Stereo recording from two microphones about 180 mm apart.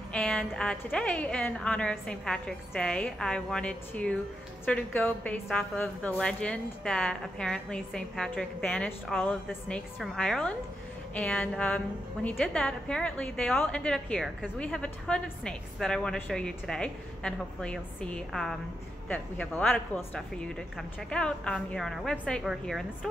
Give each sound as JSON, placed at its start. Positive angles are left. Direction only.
{"t": 0.1, "sound": "a woman's voice", "side_deg": 5}